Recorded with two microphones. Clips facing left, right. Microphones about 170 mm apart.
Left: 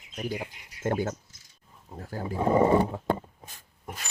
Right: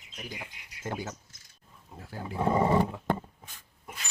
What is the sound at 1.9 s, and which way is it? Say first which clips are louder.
Dog: left 5 dB; 45° left (ahead or behind).